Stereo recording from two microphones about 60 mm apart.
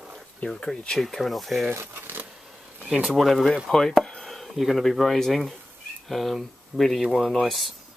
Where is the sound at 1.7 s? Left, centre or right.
Right.